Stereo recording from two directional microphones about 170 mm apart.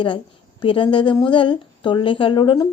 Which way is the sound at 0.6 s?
30° left (ahead or behind).